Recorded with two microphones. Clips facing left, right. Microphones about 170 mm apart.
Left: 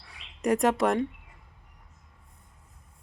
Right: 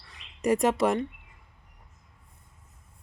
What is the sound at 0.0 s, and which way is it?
Bird, 10° left (ahead or behind).